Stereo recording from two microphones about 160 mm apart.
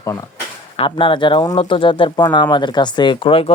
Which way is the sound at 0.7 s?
30° left (ahead or behind).